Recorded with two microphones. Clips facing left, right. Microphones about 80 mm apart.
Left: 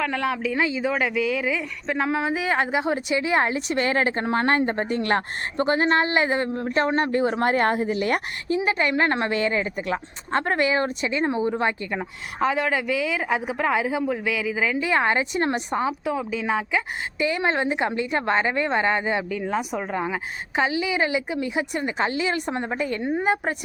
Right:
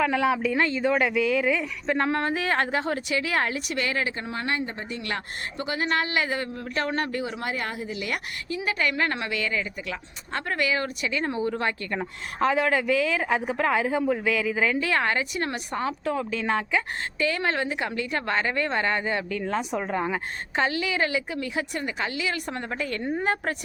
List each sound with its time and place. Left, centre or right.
0.0 s speech: centre
11.9 s a woman's voice: centre
14.8 s speech: centre
17.2 s speech: centre